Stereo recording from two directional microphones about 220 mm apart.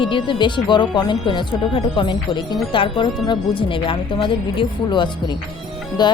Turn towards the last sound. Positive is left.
turn(degrees=20)  # may be behind; listen again after turning